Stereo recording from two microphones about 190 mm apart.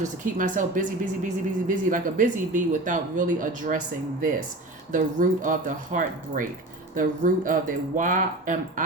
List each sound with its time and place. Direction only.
0.0 s speech: 45° right (ahead or behind)